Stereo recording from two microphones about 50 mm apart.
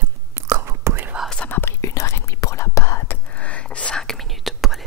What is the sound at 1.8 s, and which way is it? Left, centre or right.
Whispering, left.